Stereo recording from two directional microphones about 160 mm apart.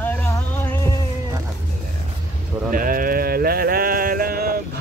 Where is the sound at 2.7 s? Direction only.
60° right (ahead or behind).